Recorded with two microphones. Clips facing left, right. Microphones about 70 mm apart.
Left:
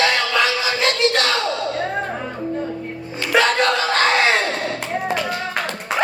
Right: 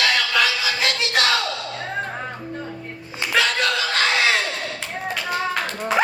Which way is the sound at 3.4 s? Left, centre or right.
Left.